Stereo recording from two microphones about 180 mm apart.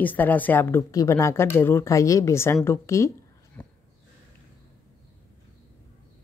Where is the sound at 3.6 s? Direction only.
10° left (ahead or behind).